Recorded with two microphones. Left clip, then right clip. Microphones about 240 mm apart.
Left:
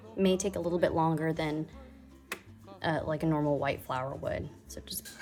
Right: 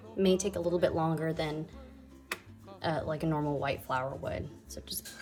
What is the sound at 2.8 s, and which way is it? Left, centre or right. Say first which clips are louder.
A woman's voice: left 2 dB; left.